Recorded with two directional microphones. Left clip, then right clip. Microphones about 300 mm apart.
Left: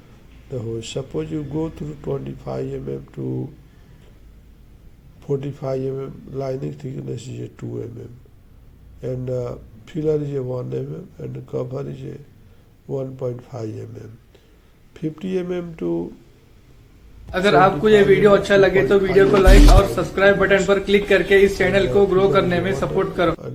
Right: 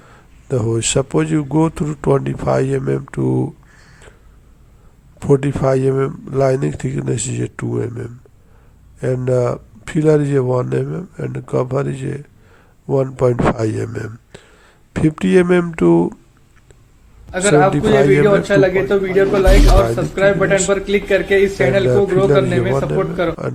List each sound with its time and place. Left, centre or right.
0.5 s speech: right
5.2 s speech: right
17.3 s a man's voice: centre